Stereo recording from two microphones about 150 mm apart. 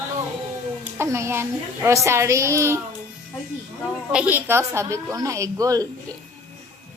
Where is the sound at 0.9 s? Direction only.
20° right (ahead or behind).